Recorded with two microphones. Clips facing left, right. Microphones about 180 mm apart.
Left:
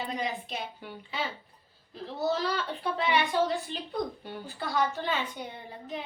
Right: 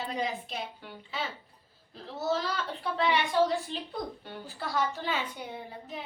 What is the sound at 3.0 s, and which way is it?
A woman's voice, centre (ahead or behind).